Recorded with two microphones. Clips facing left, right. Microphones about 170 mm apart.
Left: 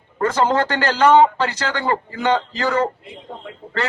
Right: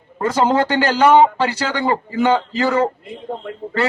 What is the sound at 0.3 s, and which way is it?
A man's voice, 15° right (ahead or behind).